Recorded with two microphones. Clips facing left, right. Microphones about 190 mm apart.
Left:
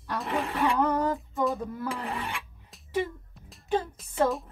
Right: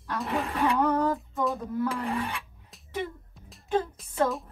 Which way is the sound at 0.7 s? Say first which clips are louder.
Right 1 dB; centre (ahead or behind).